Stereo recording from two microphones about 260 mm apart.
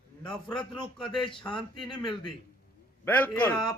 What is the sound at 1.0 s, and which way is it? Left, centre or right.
Speech, centre.